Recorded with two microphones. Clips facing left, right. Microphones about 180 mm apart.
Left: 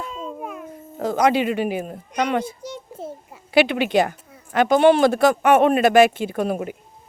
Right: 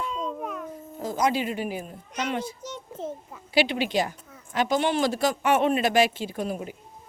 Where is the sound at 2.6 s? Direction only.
10° left (ahead or behind).